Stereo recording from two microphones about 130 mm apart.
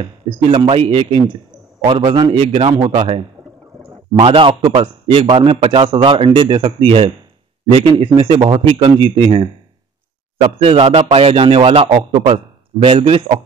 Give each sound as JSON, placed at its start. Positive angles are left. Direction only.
{"t": 0.0, "sound": "a man's voice", "side_deg": -45}
{"t": 10.6, "sound": "a man's voice", "side_deg": -50}